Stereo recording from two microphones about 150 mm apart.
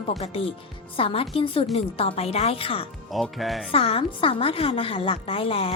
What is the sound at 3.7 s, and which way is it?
A woman's voice, 40° left (ahead or behind).